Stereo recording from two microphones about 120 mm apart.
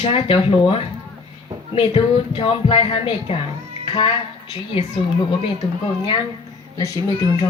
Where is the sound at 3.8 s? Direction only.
40° left (ahead or behind).